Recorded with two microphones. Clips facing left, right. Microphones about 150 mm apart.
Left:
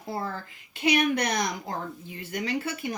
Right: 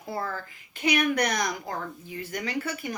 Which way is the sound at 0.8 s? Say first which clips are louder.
Left 1 dB; 25° left (ahead or behind).